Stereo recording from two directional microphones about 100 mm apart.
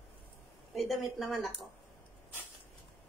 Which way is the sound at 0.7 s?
Centre (ahead or behind).